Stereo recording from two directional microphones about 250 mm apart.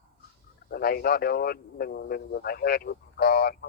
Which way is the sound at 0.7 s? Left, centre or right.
Left.